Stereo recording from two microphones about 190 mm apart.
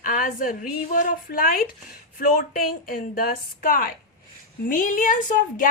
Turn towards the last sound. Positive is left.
turn(degrees=45)  # may be behind; listen again after turning